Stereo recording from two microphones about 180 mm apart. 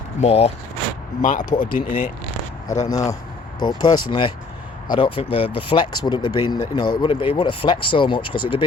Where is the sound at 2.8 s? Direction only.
20° left (ahead or behind).